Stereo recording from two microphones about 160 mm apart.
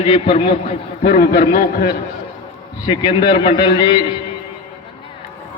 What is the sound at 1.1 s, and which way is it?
Speech, 60° left (ahead or behind).